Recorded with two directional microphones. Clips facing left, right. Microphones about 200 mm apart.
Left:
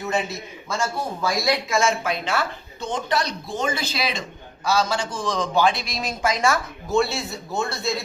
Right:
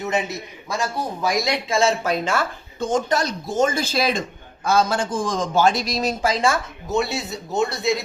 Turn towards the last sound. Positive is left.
turn(degrees=-20)  # may be behind; listen again after turning